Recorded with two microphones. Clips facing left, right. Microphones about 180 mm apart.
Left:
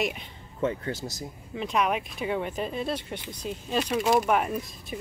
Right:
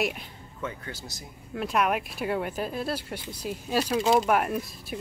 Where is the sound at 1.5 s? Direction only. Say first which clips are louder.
Right 1 dB; 5° right (ahead or behind).